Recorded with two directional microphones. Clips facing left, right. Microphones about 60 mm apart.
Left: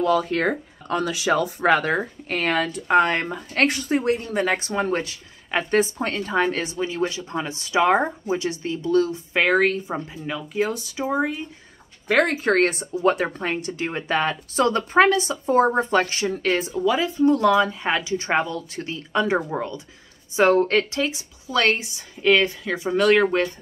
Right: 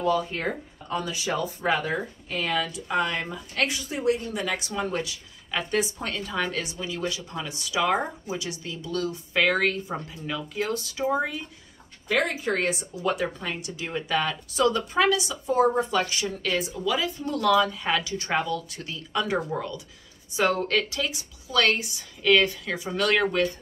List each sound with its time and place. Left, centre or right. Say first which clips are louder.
0.0 s speech: left 5 dB; left; by 11.4 s centre
12.1 s a woman's voice: left 6 dB; left